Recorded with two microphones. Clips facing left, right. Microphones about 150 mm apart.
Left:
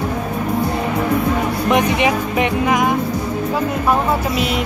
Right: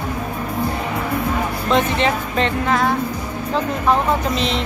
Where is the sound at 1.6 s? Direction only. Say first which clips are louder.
Left 2 dB; 15° left (ahead or behind).